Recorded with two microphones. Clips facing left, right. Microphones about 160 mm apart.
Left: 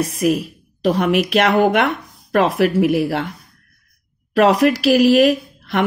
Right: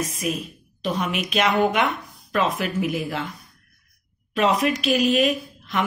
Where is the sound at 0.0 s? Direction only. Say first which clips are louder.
Left 9 dB; 65° left (ahead or behind).